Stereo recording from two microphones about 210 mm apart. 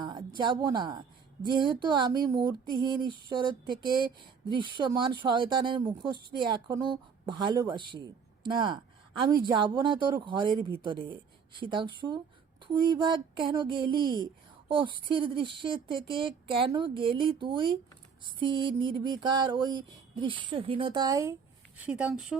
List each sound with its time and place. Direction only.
0.0 s speech: 20° right (ahead or behind)
1.5 s a sound: 20° right (ahead or behind)
21.8 s speech: 5° right (ahead or behind)